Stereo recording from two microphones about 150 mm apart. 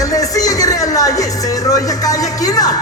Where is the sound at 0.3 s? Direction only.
25° left (ahead or behind).